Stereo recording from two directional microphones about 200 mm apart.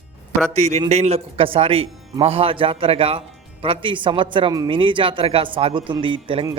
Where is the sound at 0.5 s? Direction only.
35° right (ahead or behind).